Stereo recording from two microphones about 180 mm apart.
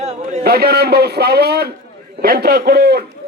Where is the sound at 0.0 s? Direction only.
35° right (ahead or behind).